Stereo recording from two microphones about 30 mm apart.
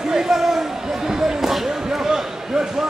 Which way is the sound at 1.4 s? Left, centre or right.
Centre.